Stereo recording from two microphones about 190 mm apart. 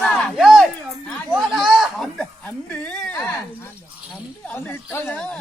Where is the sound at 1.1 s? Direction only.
Centre (ahead or behind).